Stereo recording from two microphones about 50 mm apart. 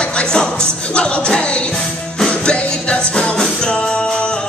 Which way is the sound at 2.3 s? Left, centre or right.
Left.